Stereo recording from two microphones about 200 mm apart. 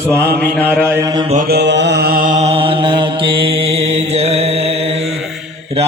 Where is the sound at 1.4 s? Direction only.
55° right (ahead or behind); by 5.1 s 30° right (ahead or behind).